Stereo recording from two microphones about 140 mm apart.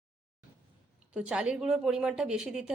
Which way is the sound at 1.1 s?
5° right (ahead or behind).